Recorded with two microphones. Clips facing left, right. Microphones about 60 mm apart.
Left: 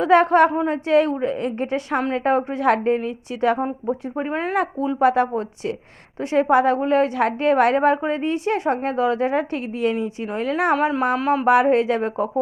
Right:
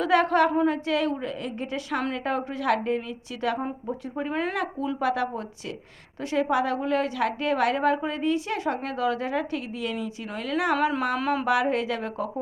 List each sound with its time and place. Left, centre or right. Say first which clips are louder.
0.0 s a woman's voice: left 6 dB; left
0.5 s a woman's voice: left 1 dB; left
0.9 s a woman's voice: left 8 dB; left
10.8 s speech: left 4 dB; centre
11.4 s a woman's voice: left 11 dB; left